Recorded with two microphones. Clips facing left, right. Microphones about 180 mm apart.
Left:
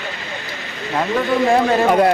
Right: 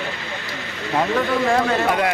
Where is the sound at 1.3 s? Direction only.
20° left (ahead or behind).